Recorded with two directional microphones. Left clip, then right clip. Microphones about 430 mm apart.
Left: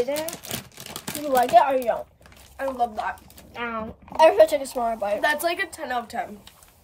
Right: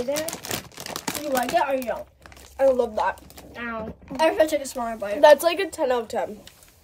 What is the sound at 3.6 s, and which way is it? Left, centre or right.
A woman's voice, centre.